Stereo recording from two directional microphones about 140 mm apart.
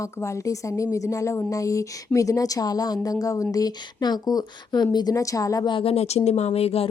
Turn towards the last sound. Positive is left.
turn(degrees=45)  # may be behind; listen again after turning